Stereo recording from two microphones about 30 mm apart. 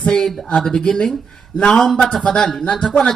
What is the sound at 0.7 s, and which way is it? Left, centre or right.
Speech, left.